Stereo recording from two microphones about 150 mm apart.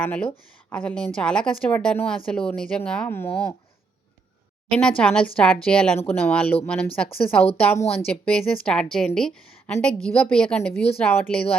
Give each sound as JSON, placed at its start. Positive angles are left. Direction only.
{"t": 0.0, "sound": "speech", "side_deg": 10}
{"t": 4.7, "sound": "speech", "side_deg": 5}